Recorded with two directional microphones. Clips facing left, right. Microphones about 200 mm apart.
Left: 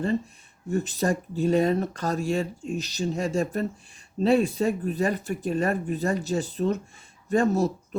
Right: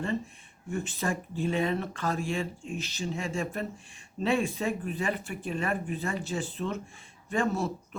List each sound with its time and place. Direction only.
0.7 s speech: 40° left (ahead or behind)